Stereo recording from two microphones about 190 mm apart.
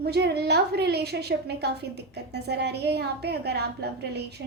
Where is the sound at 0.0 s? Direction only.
60° right (ahead or behind).